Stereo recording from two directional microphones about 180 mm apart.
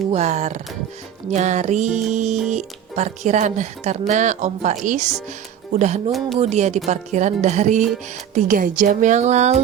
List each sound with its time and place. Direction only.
0.1 s speech: 40° right (ahead or behind)
6.1 s speech: centre (ahead or behind)
6.4 s a woman's voice: 40° right (ahead or behind)